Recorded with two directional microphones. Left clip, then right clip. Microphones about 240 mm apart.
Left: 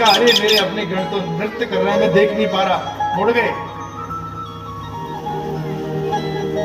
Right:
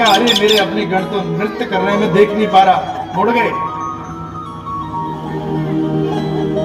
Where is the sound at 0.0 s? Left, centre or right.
Centre.